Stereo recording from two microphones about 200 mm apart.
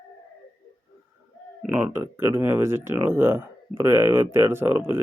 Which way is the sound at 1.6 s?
10° right (ahead or behind).